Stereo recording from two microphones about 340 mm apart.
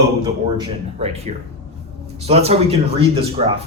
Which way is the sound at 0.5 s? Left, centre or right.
Centre.